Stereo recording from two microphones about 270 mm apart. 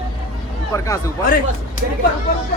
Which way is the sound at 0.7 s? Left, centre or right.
Centre.